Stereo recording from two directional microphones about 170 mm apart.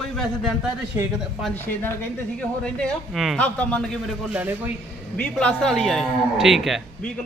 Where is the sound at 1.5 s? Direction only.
10° left (ahead or behind).